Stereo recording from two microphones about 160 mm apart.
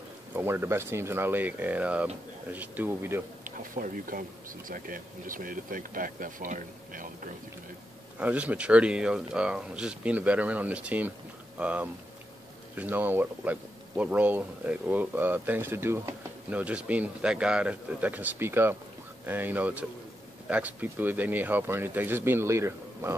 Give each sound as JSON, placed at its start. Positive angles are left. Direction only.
{"t": 0.3, "sound": "speech", "side_deg": -15}
{"t": 3.4, "sound": "speech", "side_deg": -55}
{"t": 8.2, "sound": "speech", "side_deg": -10}